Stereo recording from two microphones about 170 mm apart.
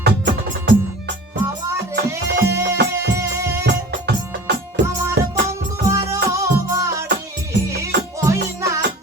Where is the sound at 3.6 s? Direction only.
90° right.